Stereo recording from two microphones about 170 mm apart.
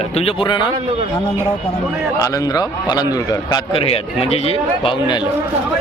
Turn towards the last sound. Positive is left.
turn(degrees=30)  # may be behind; listen again after turning